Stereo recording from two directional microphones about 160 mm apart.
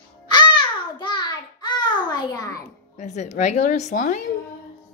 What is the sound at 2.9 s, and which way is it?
A woman's voice, 45° left (ahead or behind).